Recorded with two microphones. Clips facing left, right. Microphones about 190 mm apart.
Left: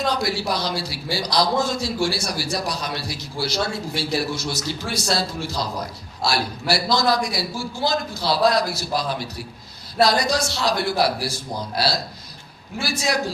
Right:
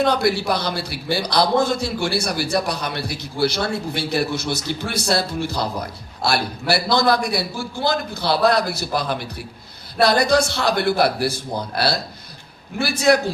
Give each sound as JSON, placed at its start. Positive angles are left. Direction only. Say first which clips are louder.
{"t": 0.0, "sound": "a man's voice", "louder": "right 5 dB", "side_deg": -60}
{"t": 12.8, "sound": "a man's voice", "louder": "right 8 dB", "side_deg": -60}